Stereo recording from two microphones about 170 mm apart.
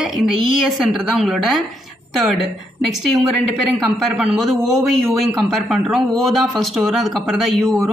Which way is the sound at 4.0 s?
Centre (ahead or behind).